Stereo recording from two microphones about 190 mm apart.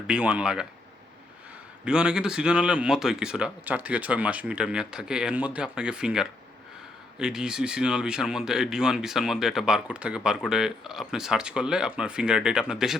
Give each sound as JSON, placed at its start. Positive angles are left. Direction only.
{"t": 0.1, "sound": "speech", "side_deg": -5}
{"t": 1.8, "sound": "speech", "side_deg": -5}